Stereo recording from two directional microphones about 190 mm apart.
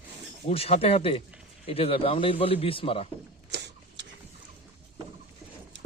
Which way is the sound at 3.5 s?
65° right (ahead or behind).